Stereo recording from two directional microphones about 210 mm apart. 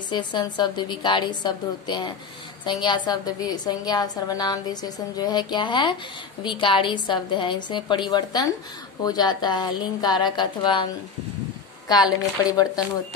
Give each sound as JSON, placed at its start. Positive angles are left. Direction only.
{"t": 0.1, "sound": "a woman's voice", "side_deg": 20}
{"t": 12.4, "sound": "speech", "side_deg": 15}